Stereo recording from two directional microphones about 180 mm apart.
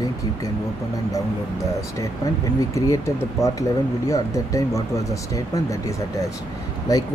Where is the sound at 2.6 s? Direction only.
15° left (ahead or behind).